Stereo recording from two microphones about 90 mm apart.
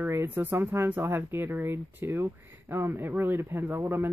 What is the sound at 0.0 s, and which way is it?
Speech, 25° right (ahead or behind).